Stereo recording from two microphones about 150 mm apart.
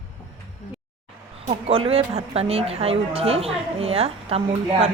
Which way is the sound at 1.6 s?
40° right (ahead or behind).